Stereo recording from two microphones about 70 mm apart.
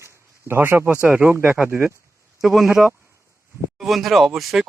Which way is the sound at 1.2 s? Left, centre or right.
Right.